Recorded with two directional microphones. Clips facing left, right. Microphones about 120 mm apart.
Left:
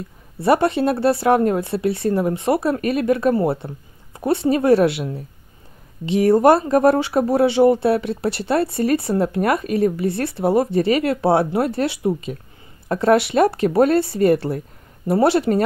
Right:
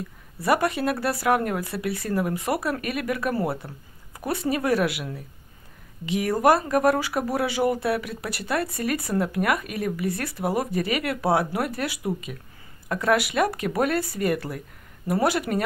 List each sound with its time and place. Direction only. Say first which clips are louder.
0.4 s speech: left 6 dB; 30° left (ahead or behind)